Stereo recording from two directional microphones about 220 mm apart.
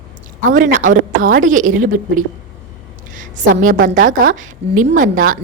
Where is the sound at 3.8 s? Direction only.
35° right (ahead or behind).